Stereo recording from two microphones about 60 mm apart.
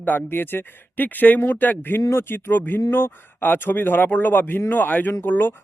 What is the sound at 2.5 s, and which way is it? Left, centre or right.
Speech, left.